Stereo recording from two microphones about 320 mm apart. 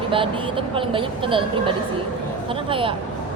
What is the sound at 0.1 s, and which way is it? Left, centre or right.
Speech, centre.